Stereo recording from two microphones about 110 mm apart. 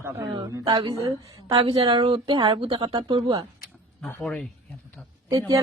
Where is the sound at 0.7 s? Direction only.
45° right (ahead or behind).